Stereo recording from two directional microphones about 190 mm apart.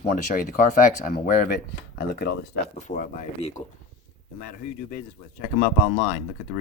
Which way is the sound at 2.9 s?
40° left (ahead or behind).